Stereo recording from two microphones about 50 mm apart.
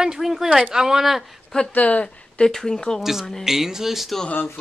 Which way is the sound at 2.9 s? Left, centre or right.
Centre.